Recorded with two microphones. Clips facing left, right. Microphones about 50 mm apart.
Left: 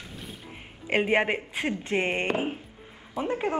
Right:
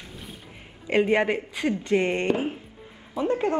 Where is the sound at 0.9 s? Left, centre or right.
Left.